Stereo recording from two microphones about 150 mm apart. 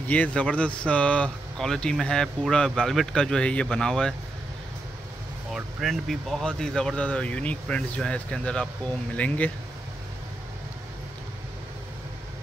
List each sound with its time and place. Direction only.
0.1 s speech: 10° left (ahead or behind)
5.5 s speech: centre (ahead or behind)